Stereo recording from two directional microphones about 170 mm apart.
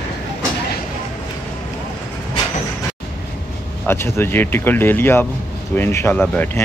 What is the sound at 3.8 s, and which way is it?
Speech, 15° left (ahead or behind).